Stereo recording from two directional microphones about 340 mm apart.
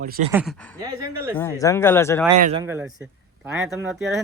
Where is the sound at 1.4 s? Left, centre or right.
Centre.